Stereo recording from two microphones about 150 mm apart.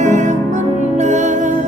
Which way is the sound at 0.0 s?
55° right (ahead or behind).